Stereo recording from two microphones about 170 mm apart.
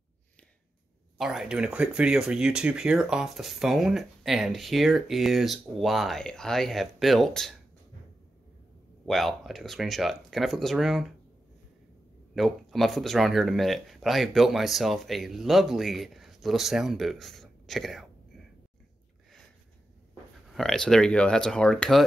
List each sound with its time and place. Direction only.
1.1 s speech: centre (ahead or behind)
9.0 s speech: centre (ahead or behind)
12.4 s speech: centre (ahead or behind)
20.4 s speech: centre (ahead or behind)